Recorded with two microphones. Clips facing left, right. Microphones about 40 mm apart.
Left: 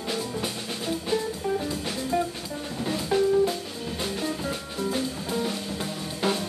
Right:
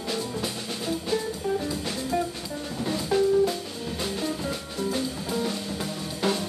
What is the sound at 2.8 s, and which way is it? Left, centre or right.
Music, centre.